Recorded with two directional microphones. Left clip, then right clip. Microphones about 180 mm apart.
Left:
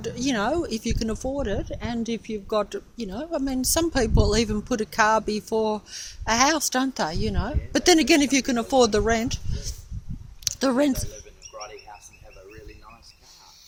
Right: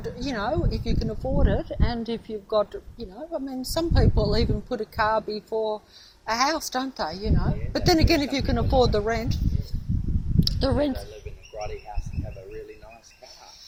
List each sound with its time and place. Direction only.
0.0 s speech: 50° left (ahead or behind)
10.6 s speech: 45° left (ahead or behind)